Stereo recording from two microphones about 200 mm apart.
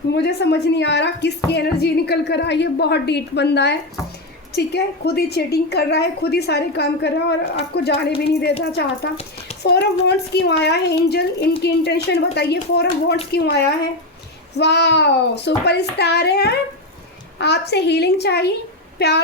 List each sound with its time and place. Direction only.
0.1 s a woman's voice: 55° left (ahead or behind)
9.6 s a woman's voice: 55° left (ahead or behind)